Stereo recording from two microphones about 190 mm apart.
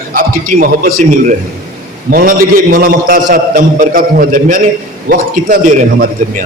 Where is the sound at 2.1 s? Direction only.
45° right (ahead or behind).